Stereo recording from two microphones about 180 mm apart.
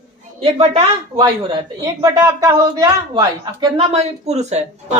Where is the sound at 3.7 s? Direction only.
35° right (ahead or behind).